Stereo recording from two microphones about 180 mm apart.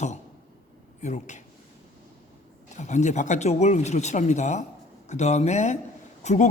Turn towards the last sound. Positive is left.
turn(degrees=40)  # may be behind; listen again after turning